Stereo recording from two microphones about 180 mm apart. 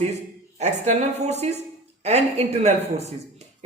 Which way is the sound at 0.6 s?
40° right (ahead or behind).